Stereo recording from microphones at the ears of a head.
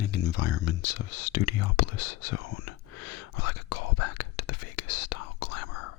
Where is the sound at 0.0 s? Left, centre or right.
Left.